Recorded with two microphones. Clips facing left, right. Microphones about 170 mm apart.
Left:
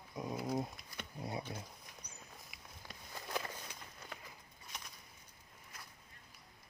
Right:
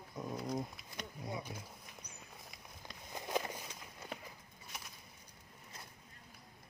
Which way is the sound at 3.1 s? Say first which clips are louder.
Right 4 dB; 20° right (ahead or behind).